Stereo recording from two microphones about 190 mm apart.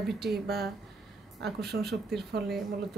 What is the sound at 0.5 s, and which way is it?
Speech, 55° right (ahead or behind).